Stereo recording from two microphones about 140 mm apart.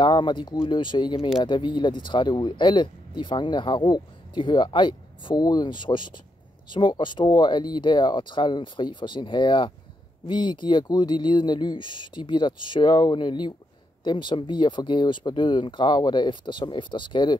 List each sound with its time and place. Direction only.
0.0 s speech: 35° left (ahead or behind)